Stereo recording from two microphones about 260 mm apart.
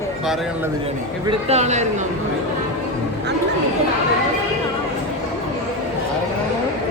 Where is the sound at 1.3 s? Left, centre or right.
Right.